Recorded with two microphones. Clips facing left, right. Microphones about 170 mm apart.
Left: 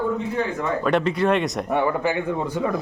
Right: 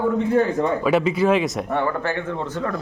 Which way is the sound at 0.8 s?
5° right (ahead or behind).